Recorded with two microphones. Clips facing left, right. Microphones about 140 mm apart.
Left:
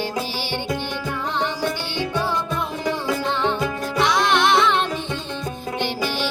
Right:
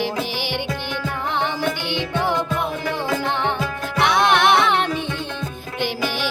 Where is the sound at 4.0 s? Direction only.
55° right (ahead or behind).